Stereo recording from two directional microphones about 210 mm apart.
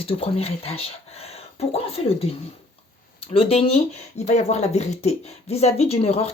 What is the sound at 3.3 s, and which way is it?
Speech, 30° left (ahead or behind).